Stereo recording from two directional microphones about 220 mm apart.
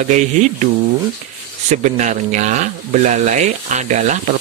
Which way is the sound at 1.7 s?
35° right (ahead or behind).